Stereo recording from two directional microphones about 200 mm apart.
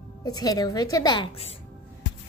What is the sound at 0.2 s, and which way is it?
A woman's voice, 20° left (ahead or behind).